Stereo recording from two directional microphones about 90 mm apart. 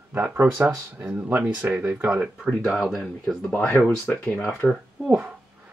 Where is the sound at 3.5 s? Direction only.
20° left (ahead or behind).